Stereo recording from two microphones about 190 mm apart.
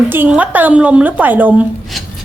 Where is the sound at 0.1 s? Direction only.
10° right (ahead or behind).